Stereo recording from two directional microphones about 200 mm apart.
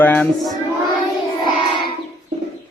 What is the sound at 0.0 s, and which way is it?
Speech, 10° left (ahead or behind).